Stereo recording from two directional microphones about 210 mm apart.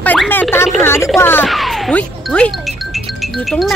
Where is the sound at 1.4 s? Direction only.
Centre (ahead or behind).